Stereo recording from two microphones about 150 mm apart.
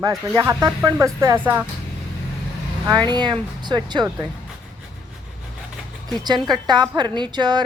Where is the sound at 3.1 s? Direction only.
30° right (ahead or behind).